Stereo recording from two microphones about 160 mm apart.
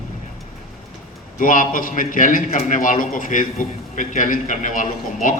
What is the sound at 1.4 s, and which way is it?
A man's voice, 55° left (ahead or behind).